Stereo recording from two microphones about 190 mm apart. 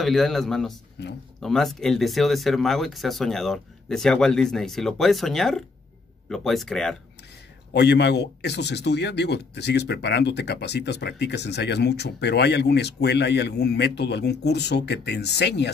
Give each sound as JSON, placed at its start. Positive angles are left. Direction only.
{"t": 0.0, "sound": "speech", "side_deg": 0}
{"t": 7.7, "sound": "speech", "side_deg": 65}